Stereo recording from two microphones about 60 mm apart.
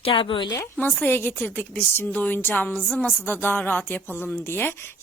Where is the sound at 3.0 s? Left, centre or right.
Left.